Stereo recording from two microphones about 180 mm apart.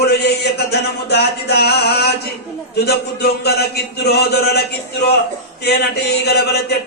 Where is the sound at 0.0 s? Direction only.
65° left (ahead or behind).